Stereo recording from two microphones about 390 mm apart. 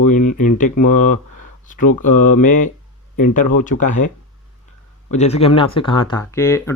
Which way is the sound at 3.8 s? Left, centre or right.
Centre.